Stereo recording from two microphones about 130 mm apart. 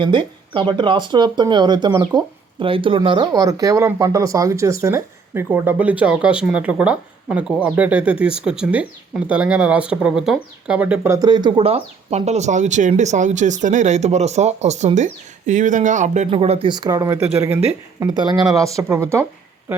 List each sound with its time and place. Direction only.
0.0 s speech: 40° right (ahead or behind)
2.6 s speech: 40° right (ahead or behind); by 11.1 s 10° right (ahead or behind)
11.1 s speech: 30° right (ahead or behind); by 16.6 s 50° right (ahead or behind)
16.6 s speech: 35° right (ahead or behind)